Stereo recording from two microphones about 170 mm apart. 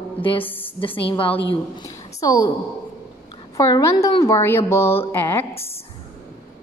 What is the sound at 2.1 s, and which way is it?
Speech, 20° left (ahead or behind).